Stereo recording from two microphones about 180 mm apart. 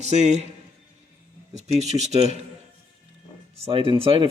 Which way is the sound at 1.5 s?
40° right (ahead or behind).